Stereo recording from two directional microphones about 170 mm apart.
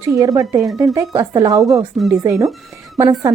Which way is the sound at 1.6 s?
Centre (ahead or behind).